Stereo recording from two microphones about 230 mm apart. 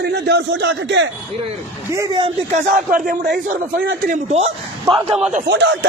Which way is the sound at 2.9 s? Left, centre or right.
Right.